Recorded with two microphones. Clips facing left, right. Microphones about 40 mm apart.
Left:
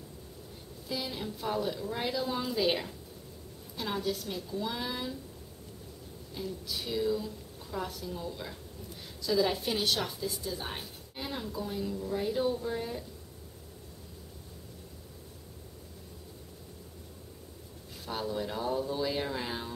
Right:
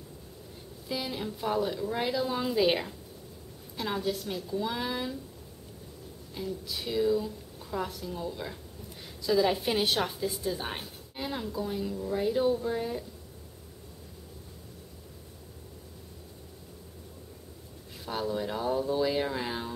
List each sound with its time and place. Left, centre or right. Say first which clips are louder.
0.8 s a woman's voice: right 2 dB; centre
6.3 s a woman's voice: right 2 dB; centre
11.1 s speech: right 3 dB; centre
18.0 s a woman's voice: right 3 dB; centre